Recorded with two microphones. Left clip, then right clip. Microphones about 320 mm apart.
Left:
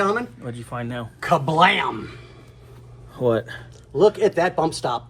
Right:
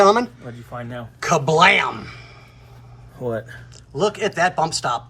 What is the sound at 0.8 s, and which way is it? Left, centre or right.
Speech, left.